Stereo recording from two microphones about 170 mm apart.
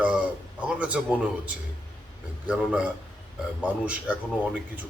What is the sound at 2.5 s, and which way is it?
A man's voice, 5° right (ahead or behind).